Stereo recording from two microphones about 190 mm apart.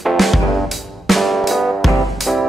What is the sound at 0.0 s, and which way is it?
Music, centre (ahead or behind).